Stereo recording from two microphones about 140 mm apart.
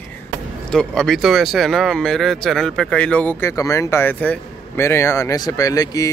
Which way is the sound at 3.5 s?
20° left (ahead or behind).